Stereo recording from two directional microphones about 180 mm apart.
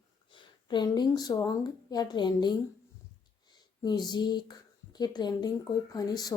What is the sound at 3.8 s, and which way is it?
Speech, 25° left (ahead or behind).